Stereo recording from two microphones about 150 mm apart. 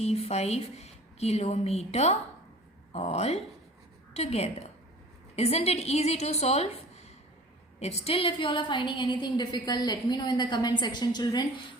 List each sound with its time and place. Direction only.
0.0 s a woman's voice: 45° left (ahead or behind); by 11.4 s 30° left (ahead or behind)